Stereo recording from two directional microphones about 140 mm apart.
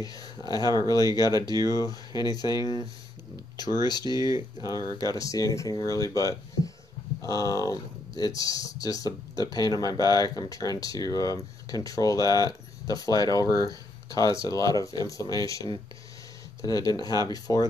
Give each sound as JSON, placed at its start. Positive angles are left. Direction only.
{"t": 0.0, "sound": "speech", "side_deg": 25}
{"t": 2.5, "sound": "speech", "side_deg": -30}
{"t": 4.2, "sound": "speech", "side_deg": -25}
{"t": 4.8, "sound": "speech", "side_deg": 25}